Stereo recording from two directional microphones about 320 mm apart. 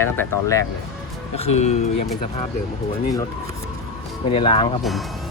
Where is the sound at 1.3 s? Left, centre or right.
Centre.